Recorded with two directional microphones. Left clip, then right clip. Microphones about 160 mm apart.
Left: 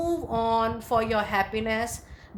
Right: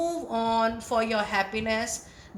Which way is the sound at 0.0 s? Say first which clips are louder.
Left 1 dB; 50° left (ahead or behind).